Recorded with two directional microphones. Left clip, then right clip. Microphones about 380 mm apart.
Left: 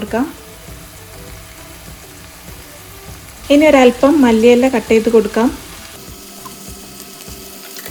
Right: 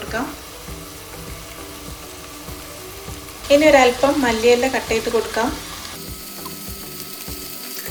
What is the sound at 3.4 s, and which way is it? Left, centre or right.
Speech, centre.